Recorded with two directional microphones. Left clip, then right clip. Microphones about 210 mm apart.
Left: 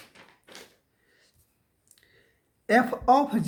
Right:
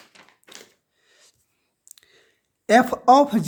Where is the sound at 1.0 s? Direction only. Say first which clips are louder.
Right 8 dB; 45° right (ahead or behind).